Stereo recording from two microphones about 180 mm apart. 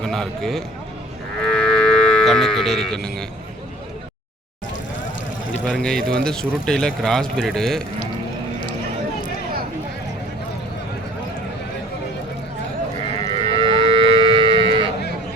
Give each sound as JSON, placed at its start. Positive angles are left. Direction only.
{"t": 0.0, "sound": "speech", "side_deg": 0}
{"t": 5.6, "sound": "speech", "side_deg": 5}
{"t": 13.4, "sound": "moo", "side_deg": -30}